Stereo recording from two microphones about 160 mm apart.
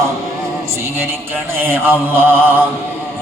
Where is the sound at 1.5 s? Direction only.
15° right (ahead or behind).